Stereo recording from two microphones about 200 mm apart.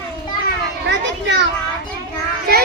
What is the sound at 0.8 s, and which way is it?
Children playing, 60° right (ahead or behind).